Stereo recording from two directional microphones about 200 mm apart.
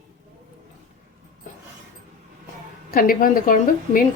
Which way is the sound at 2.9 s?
45° left (ahead or behind).